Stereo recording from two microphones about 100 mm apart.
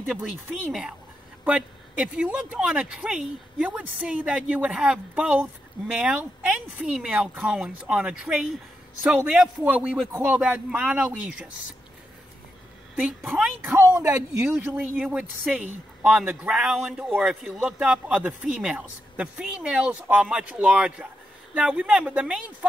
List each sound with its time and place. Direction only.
0.2 s speech: 5° right (ahead or behind)
12.9 s speech: 10° right (ahead or behind)
13.7 s speech: 20° right (ahead or behind)